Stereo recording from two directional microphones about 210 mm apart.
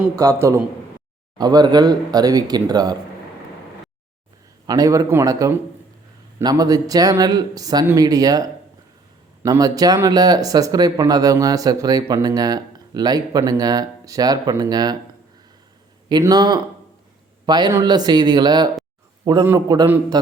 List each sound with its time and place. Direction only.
1.4 s speech: 20° right (ahead or behind)
4.6 s speech: 15° right (ahead or behind)
16.0 s speech: 20° right (ahead or behind)